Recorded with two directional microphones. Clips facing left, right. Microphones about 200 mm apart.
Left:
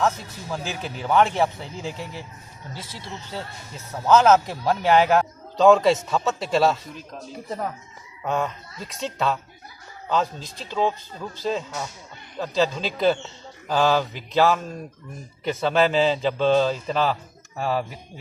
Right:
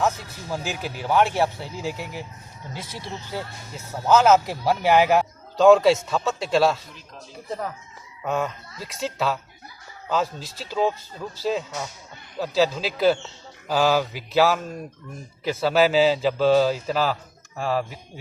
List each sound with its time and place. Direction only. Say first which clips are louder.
0.5 s a man's voice: right 1 dB; 5° right (ahead or behind)
4.1 s a man's voice: even; 5° right (ahead or behind)